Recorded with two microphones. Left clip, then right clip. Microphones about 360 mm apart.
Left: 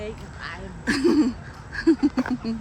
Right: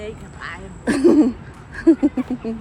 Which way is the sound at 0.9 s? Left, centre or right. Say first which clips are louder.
Right 6 dB; centre.